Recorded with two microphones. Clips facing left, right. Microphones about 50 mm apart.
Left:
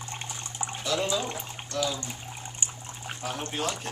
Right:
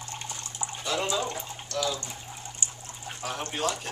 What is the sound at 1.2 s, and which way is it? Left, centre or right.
Water, centre.